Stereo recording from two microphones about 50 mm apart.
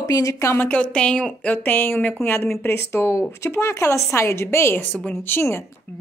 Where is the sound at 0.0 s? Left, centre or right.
Left.